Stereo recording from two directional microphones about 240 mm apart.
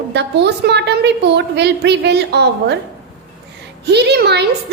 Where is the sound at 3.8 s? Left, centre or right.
Right.